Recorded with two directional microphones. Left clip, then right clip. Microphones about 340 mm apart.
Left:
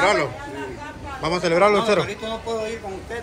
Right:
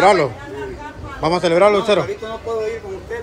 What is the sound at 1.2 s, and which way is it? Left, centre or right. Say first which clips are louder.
Speech: right 4 dB; centre.